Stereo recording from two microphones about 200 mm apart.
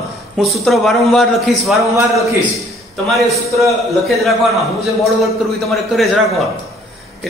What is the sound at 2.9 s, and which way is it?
A man's voice, centre (ahead or behind).